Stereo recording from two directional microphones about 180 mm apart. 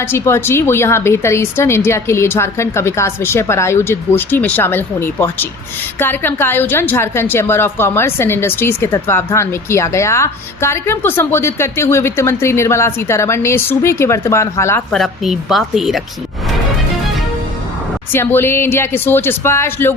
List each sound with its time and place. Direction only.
0.1 s a woman's voice: 15° left (ahead or behind)
14.9 s a woman's voice: centre (ahead or behind)
18.1 s a woman's voice: 10° left (ahead or behind)